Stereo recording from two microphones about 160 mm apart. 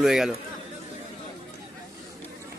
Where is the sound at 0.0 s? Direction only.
Centre (ahead or behind).